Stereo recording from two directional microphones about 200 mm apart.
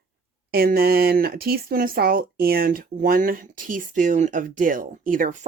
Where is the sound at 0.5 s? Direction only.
50° right (ahead or behind).